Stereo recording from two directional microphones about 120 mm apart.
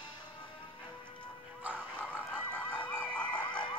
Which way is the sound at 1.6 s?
15° right (ahead or behind).